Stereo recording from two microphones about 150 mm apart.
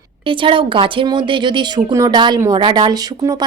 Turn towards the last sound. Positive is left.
turn(degrees=-25)  # may be behind; listen again after turning